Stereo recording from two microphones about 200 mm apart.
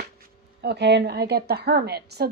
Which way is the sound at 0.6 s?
55° right (ahead or behind).